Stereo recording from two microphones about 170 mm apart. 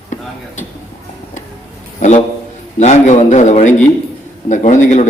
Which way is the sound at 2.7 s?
45° left (ahead or behind).